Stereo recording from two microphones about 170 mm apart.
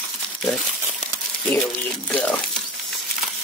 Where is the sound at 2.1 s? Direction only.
5° left (ahead or behind).